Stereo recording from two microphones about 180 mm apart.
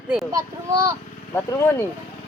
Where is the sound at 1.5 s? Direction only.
15° left (ahead or behind).